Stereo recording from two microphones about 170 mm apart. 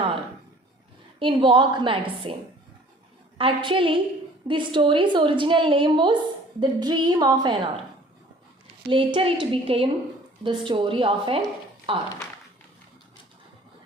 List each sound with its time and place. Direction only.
1.2 s a woman's voice: 30° right (ahead or behind)
3.3 s a woman's voice: 30° right (ahead or behind)
8.9 s a woman's voice: 30° right (ahead or behind)